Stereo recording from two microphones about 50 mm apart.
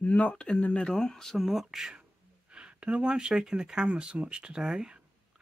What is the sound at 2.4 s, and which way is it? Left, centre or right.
Speech, centre.